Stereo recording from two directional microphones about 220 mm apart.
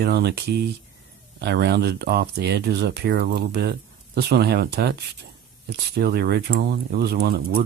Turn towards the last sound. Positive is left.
turn(degrees=-45)  # may be behind; listen again after turning